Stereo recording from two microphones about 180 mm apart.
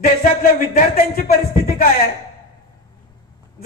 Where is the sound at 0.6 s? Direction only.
50° left (ahead or behind).